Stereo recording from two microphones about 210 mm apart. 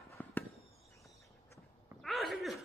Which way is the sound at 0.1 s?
10° left (ahead or behind).